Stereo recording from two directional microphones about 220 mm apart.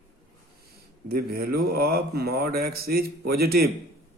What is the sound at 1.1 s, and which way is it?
Speech, 45° right (ahead or behind).